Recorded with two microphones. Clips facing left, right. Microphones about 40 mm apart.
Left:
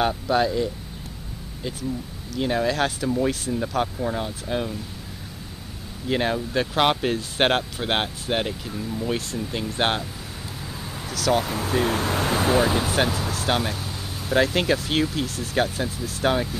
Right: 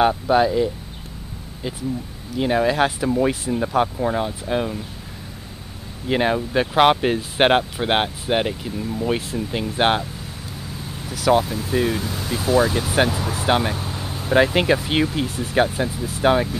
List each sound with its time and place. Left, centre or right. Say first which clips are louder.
0.0 s speech: right 5 dB; centre
6.0 s speech: right 4 dB; centre
11.1 s speech: right 5 dB; centre
11.9 s speech: left 2 dB; left
12.5 s speech: right 2 dB; centre
12.9 s speech: right 3 dB; centre